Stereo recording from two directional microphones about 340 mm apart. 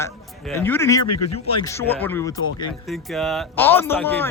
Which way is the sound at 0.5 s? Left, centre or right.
Centre.